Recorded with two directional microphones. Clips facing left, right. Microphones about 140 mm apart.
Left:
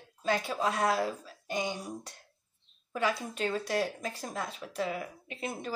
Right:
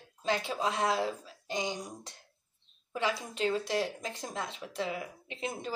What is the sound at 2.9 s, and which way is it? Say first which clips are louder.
A woman's voice: left 2 dB; 25° right (ahead or behind).